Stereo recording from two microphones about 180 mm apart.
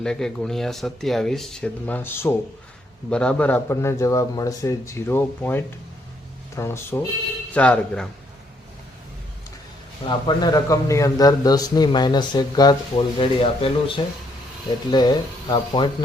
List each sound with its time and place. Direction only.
0.0 s a man's voice: 5° left (ahead or behind)
10.1 s a man's voice: 25° left (ahead or behind)
14.9 s a man's voice: 25° left (ahead or behind)